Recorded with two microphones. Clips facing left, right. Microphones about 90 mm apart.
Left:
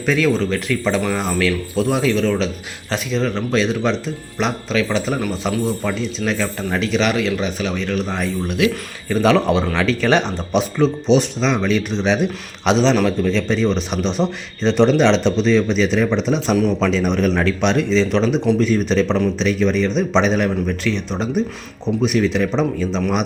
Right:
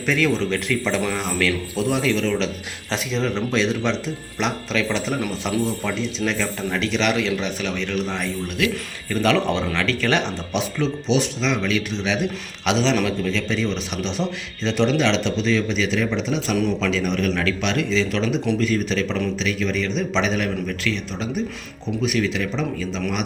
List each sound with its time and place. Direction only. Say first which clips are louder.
0.0 s a man's voice: left 3 dB; 10° left (ahead or behind); by 23.2 s 25° left (ahead or behind)